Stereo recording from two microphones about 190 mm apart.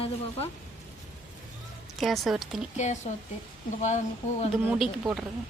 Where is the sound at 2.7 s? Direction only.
40° left (ahead or behind).